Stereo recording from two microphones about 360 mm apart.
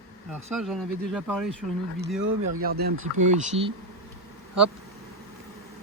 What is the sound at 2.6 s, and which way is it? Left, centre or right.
Speech, right.